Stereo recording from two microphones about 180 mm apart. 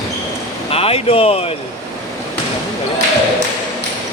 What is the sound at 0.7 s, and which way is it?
Speech, 35° left (ahead or behind).